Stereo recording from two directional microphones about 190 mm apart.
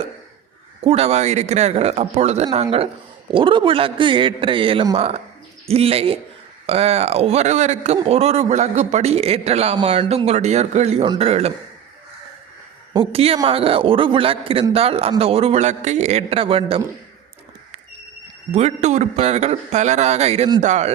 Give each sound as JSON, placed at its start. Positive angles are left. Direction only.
{"t": 0.9, "sound": "a man's voice", "side_deg": -35}
{"t": 12.9, "sound": "a man's voice", "side_deg": -25}
{"t": 18.5, "sound": "a man's voice", "side_deg": -35}